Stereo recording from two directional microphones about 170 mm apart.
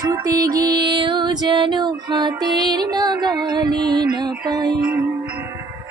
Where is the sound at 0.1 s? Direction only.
20° right (ahead or behind).